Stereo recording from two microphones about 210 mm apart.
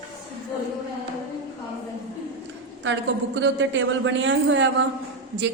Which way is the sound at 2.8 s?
60° right (ahead or behind).